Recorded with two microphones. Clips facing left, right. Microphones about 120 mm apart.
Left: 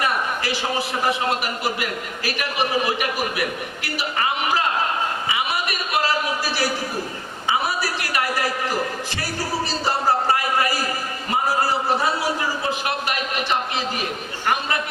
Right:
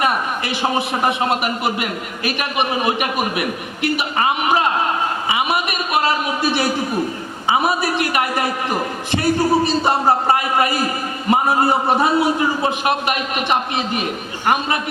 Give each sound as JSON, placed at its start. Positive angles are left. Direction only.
{"t": 0.6, "sound": "a man's voice", "side_deg": -20}
{"t": 6.4, "sound": "a man's voice", "side_deg": -20}
{"t": 7.8, "sound": "a man's voice", "side_deg": -20}
{"t": 9.5, "sound": "music", "side_deg": -55}
{"t": 10.2, "sound": "a sound", "side_deg": -20}
{"t": 11.3, "sound": "a man's voice", "side_deg": -25}
{"t": 11.7, "sound": "music", "side_deg": -55}
{"t": 12.8, "sound": "a man's voice", "side_deg": -20}